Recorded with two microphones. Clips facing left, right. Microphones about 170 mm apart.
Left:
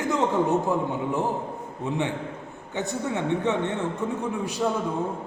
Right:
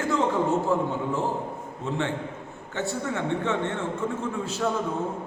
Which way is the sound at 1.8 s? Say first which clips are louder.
Left 1 dB; 15° left (ahead or behind).